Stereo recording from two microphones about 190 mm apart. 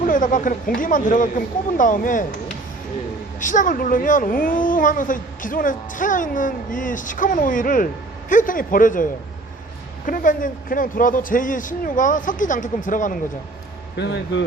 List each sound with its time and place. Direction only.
0.0 s speech: 45° left (ahead or behind)
3.4 s speech: 40° left (ahead or behind)
10.1 s speech: 45° left (ahead or behind)
13.9 s speech: 65° left (ahead or behind)